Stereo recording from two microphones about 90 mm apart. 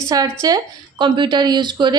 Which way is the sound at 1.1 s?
60° right (ahead or behind).